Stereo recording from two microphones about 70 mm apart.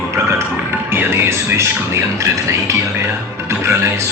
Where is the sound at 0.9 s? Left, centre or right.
Right.